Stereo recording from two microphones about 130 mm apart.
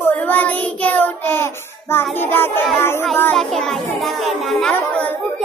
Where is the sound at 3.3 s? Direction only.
Centre (ahead or behind).